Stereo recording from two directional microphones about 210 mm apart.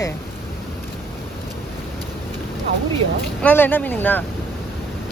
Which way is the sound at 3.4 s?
10° left (ahead or behind).